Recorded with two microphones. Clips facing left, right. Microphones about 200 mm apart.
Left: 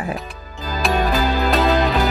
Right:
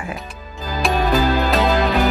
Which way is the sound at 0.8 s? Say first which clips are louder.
Even; centre (ahead or behind).